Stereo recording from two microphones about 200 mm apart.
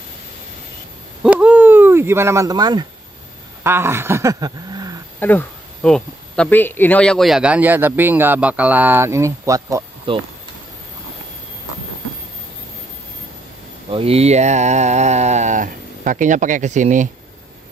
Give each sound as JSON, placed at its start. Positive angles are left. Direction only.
{"t": 1.2, "sound": "owl", "side_deg": -5}
{"t": 3.6, "sound": "speech", "side_deg": -10}
{"t": 5.2, "sound": "speech", "side_deg": 5}
{"t": 13.8, "sound": "speech", "side_deg": -30}